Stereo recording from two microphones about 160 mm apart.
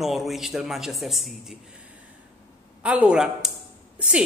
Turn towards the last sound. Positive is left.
turn(degrees=-5)  # may be behind; listen again after turning